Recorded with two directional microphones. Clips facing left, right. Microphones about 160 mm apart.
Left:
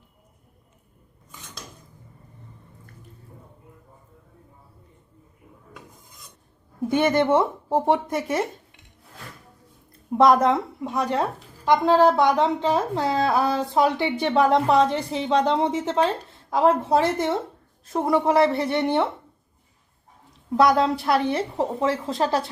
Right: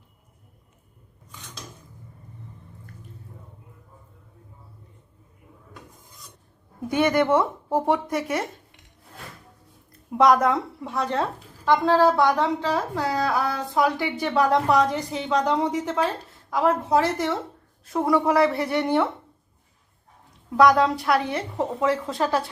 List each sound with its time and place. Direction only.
6.8 s a woman's voice: 25° left (ahead or behind)
10.2 s a woman's voice: 25° left (ahead or behind)
10.8 s a woman's voice: 15° left (ahead or behind)
20.6 s a woman's voice: 30° left (ahead or behind)